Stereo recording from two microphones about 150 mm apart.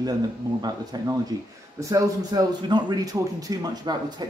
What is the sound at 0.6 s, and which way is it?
A man's voice, 25° right (ahead or behind).